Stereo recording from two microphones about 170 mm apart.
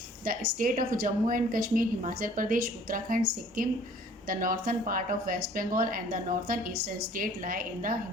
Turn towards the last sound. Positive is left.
turn(degrees=-55)  # may be behind; listen again after turning